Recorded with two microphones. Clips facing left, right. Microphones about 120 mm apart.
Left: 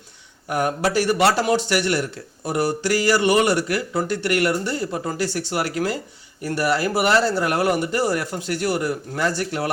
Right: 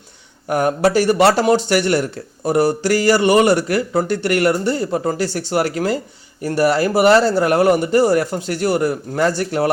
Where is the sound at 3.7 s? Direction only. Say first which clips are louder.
Right 5 dB; 50° right (ahead or behind).